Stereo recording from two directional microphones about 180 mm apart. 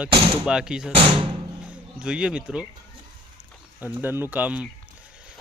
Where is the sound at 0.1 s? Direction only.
30° right (ahead or behind).